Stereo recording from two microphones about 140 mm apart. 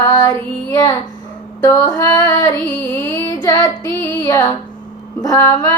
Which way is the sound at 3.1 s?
25° left (ahead or behind).